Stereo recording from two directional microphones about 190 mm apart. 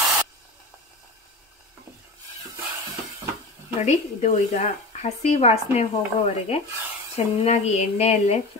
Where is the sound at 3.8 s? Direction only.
35° left (ahead or behind).